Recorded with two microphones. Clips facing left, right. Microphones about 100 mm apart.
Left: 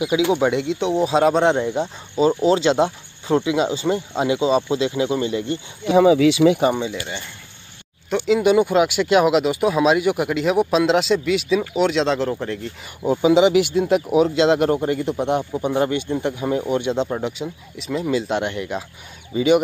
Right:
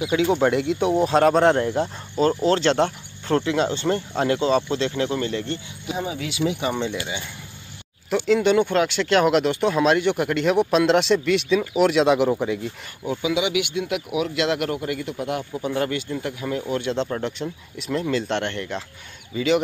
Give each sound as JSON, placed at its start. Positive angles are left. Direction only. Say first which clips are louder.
{"t": 0.3, "sound": "speech", "louder": "left 1 dB", "side_deg": 5}
{"t": 5.9, "sound": "speech", "louder": "left 15 dB", "side_deg": 90}
{"t": 7.0, "sound": "speech", "louder": "even", "side_deg": -5}
{"t": 8.1, "sound": "speech", "louder": "left 2 dB", "side_deg": 5}
{"t": 13.0, "sound": "speech", "louder": "left 8 dB", "side_deg": 30}